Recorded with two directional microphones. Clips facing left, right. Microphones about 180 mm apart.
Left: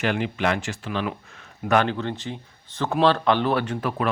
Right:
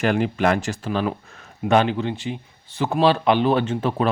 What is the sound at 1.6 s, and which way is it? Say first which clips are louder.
Speech: right 3 dB; 20° right (ahead or behind).